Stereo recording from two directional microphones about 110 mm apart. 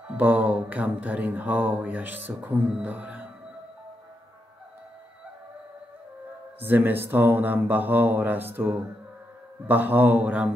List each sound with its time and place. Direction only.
0.2 s speech: 15° right (ahead or behind)
6.6 s speech: 20° right (ahead or behind)